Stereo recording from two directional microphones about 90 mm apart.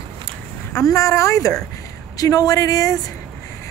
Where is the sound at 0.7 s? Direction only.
35° left (ahead or behind).